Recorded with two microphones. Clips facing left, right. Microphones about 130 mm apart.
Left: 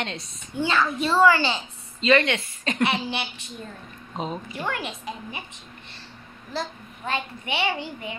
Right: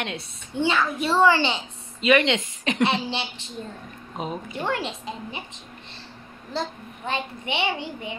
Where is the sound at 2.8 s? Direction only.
25° right (ahead or behind).